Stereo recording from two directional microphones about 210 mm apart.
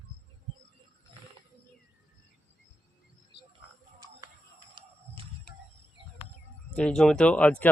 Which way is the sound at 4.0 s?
15° right (ahead or behind).